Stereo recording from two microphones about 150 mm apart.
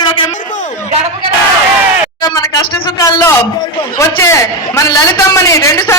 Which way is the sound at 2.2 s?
25° left (ahead or behind).